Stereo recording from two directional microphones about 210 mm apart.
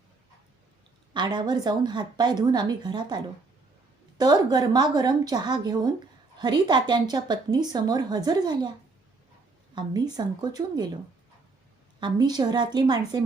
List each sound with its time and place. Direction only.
1.1 s a woman's voice: 20° right (ahead or behind)
4.2 s a woman's voice: 20° right (ahead or behind)
9.7 s a woman's voice: 20° right (ahead or behind)
11.9 s a woman's voice: 20° right (ahead or behind)